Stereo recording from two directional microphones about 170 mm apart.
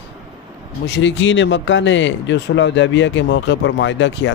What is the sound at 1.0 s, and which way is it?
Speech, 90° left.